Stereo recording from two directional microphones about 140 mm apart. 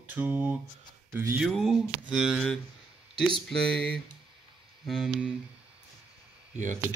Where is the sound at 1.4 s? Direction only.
Centre (ahead or behind).